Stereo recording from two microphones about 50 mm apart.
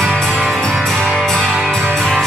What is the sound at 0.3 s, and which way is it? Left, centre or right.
Music, centre.